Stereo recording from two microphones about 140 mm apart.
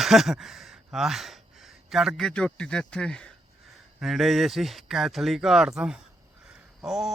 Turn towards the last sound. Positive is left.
turn(degrees=0)  # may be behind; listen again after turning